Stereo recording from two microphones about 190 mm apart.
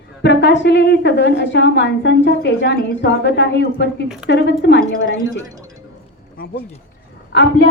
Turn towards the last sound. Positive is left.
turn(degrees=65)  # may be behind; listen again after turning